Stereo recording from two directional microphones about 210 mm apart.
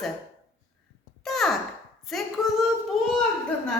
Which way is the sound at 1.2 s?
Centre (ahead or behind).